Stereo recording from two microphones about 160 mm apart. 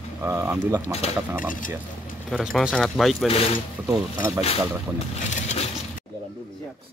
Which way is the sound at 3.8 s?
20° right (ahead or behind).